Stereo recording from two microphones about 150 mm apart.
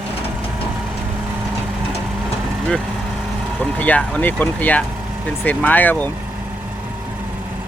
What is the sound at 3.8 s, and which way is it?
Speech, 10° left (ahead or behind).